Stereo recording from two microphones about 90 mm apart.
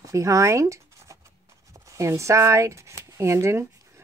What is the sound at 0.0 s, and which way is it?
Speech, 35° right (ahead or behind).